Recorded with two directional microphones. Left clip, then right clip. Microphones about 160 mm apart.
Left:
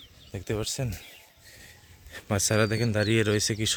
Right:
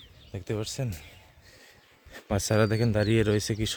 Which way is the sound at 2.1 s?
25° right (ahead or behind).